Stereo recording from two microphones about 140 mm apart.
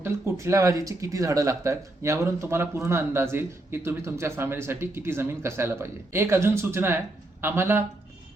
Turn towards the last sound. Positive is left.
turn(degrees=-15)  # may be behind; listen again after turning